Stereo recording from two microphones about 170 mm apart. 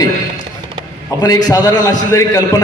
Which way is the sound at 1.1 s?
20° left (ahead or behind).